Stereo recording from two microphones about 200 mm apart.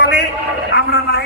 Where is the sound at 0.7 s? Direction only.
55° left (ahead or behind).